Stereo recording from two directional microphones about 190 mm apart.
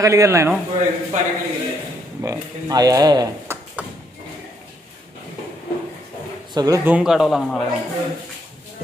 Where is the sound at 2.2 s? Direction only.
20° right (ahead or behind).